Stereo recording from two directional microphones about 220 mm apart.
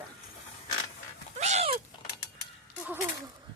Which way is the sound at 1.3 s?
30° right (ahead or behind).